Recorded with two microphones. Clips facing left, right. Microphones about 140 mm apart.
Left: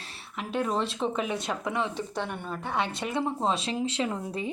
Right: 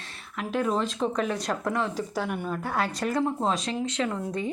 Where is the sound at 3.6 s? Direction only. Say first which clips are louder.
Right 1 dB; 30° left (ahead or behind).